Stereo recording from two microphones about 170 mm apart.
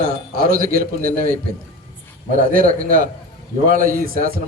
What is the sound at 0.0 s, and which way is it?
A man's voice, 60° right (ahead or behind).